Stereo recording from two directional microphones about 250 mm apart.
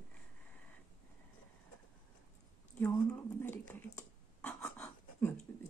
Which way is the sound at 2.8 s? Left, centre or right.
Centre.